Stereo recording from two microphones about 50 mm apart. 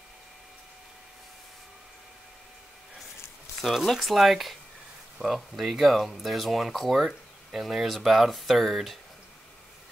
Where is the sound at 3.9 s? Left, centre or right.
Centre.